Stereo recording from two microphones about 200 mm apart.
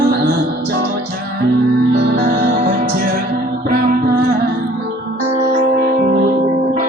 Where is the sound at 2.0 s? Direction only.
50° right (ahead or behind).